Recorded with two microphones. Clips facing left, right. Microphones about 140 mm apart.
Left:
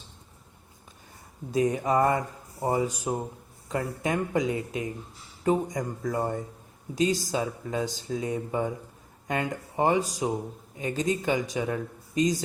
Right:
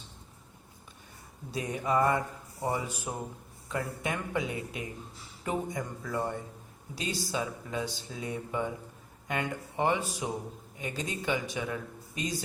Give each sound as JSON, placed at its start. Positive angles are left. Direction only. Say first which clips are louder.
{"t": 1.5, "sound": "speech", "louder": "left 7 dB", "side_deg": 45}
{"t": 5.5, "sound": "speech", "louder": "left 7 dB", "side_deg": 40}